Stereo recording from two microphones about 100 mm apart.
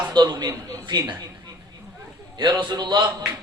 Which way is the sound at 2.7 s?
50° right (ahead or behind).